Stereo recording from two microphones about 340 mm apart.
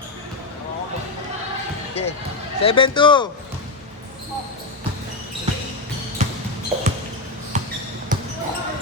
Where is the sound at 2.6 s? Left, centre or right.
Centre.